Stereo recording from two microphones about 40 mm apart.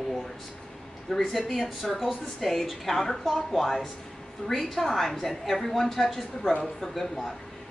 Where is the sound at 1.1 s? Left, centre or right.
Centre.